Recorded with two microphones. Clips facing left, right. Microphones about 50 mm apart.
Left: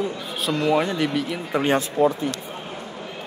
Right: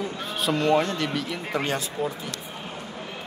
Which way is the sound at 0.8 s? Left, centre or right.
Centre.